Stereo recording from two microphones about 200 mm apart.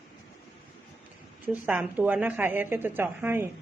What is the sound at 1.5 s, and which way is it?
A woman's voice, 5° right (ahead or behind).